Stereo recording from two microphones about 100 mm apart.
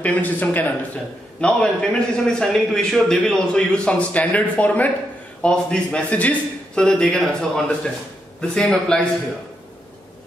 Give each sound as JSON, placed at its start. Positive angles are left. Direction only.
{"t": 0.0, "sound": "a man's voice", "side_deg": 15}